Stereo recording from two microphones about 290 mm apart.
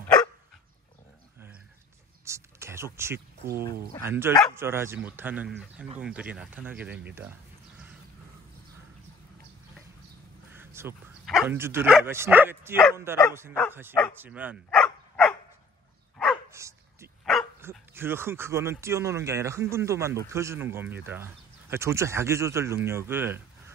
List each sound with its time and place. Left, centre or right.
2.2 s a sound: centre
3.4 s speech: right
4.0 s speech: centre
10.5 s speech: centre
14.1 s bow-wow: centre
16.2 s dog: centre
17.2 s speech: centre